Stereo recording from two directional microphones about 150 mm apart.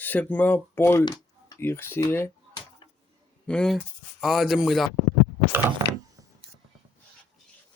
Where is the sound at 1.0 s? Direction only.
25° left (ahead or behind).